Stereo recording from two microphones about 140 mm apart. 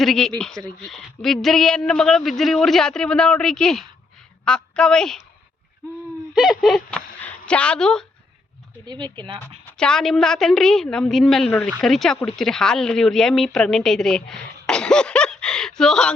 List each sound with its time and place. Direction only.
0.0 s a woman's voice: 5° left (ahead or behind)
6.3 s speech: centre (ahead or behind)
8.9 s speech: 30° right (ahead or behind)
9.7 s speech: 5° left (ahead or behind)